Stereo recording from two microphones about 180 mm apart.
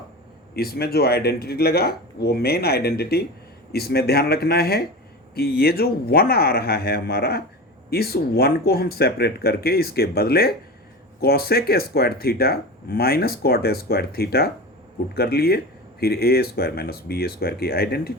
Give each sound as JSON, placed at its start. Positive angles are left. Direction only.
{"t": 0.5, "sound": "speech", "side_deg": 60}